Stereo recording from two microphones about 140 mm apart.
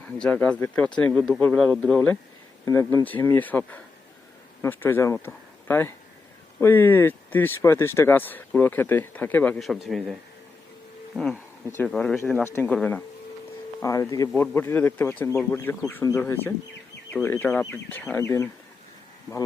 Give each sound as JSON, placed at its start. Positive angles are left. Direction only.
{"t": 0.2, "sound": "speech", "side_deg": 10}
{"t": 9.6, "sound": "a man's voice", "side_deg": 0}